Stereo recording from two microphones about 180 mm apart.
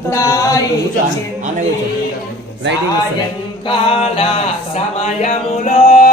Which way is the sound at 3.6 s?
30° left (ahead or behind).